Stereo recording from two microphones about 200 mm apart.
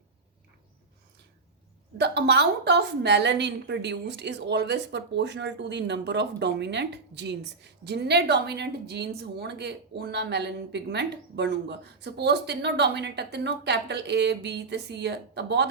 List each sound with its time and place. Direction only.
2.0 s a woman's voice: 55° right (ahead or behind)